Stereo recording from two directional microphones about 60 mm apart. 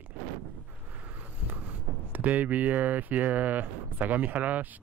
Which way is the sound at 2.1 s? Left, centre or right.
Right.